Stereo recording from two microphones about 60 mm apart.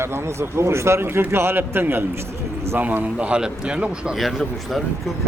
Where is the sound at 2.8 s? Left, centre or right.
Right.